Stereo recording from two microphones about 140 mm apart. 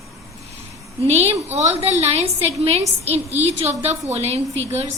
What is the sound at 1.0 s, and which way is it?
A woman's voice, 50° right (ahead or behind).